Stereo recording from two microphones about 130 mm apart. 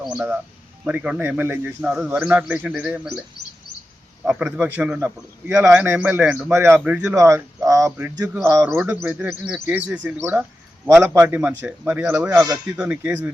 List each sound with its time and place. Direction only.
0.0 s a man's voice: 10° right (ahead or behind)
1.9 s a man's voice: 5° right (ahead or behind)
4.3 s a man's voice: 5° right (ahead or behind)